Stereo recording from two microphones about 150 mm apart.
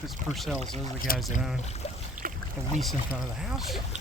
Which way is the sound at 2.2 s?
70° right (ahead or behind).